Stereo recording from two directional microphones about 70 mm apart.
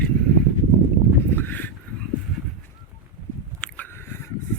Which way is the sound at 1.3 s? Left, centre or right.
Left.